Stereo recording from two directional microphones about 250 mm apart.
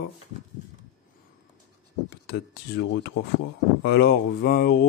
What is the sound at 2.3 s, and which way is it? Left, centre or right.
Speech, left.